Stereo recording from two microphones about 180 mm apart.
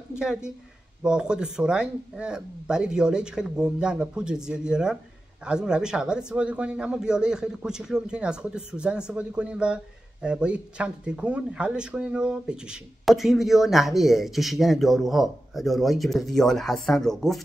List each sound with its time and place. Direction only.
0.2 s speech: 5° right (ahead or behind)